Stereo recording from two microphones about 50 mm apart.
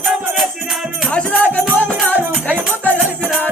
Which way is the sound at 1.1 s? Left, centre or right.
Left.